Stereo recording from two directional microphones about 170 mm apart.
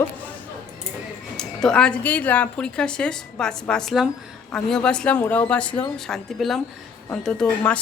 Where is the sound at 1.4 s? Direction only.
5° left (ahead or behind).